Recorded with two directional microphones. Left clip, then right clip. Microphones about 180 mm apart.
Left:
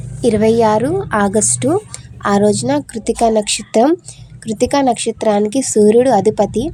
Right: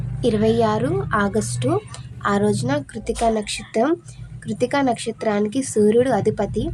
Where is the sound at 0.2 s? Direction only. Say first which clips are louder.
Left 6 dB; 30° left (ahead or behind).